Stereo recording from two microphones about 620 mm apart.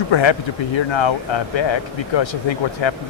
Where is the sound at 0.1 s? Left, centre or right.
Left.